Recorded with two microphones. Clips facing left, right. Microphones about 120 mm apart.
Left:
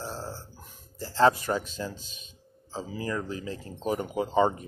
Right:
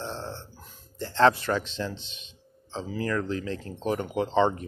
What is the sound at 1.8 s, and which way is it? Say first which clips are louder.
Speech: right 2 dB; 10° left (ahead or behind).